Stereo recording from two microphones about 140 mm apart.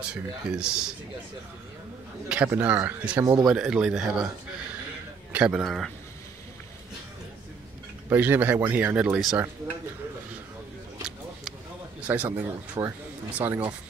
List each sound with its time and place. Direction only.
0.0 s speech: 5° right (ahead or behind)
2.2 s speech: 10° right (ahead or behind)
5.3 s speech: 5° right (ahead or behind)
8.1 s speech: 15° right (ahead or behind)
12.1 s speech: 15° right (ahead or behind)
12.8 s speech: 30° right (ahead or behind)
13.4 s speech: 15° right (ahead or behind)